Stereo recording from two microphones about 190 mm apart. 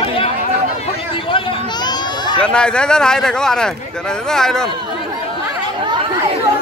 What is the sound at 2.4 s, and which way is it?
Speech, 5° left (ahead or behind).